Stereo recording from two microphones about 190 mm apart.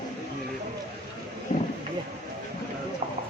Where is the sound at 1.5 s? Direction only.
35° left (ahead or behind).